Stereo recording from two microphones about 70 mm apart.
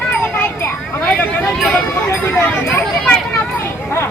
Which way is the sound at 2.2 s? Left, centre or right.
Left.